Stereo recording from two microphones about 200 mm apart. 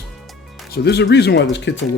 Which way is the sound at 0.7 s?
55° left (ahead or behind).